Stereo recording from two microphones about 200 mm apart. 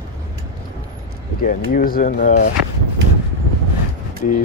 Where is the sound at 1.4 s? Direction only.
45° left (ahead or behind).